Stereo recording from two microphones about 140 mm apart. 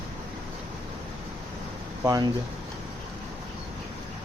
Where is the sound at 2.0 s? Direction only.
25° right (ahead or behind).